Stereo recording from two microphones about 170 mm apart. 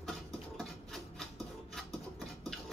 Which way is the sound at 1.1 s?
Centre (ahead or behind).